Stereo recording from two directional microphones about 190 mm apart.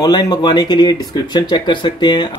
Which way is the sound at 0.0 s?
20° left (ahead or behind).